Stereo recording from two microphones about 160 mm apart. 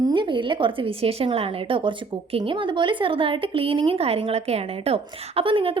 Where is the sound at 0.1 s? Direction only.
30° right (ahead or behind).